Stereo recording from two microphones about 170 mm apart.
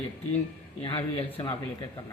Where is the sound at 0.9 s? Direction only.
35° left (ahead or behind).